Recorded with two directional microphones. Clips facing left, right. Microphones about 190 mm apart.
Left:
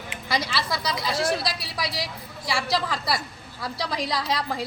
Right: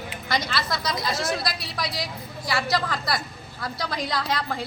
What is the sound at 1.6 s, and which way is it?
Speech, 35° left (ahead or behind).